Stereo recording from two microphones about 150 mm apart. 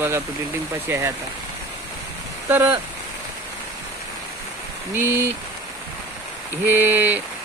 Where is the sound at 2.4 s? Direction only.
10° right (ahead or behind).